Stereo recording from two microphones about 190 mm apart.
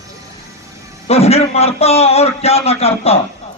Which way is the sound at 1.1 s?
30° left (ahead or behind).